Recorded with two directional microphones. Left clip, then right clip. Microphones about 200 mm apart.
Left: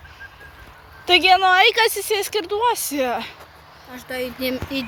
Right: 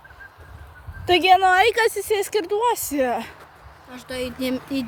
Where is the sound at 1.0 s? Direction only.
30° right (ahead or behind).